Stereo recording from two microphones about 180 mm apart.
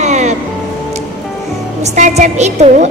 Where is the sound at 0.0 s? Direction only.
40° right (ahead or behind).